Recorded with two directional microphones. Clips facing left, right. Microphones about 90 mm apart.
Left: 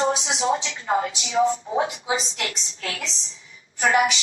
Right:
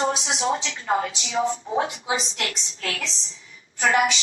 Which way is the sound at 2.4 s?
25° left (ahead or behind).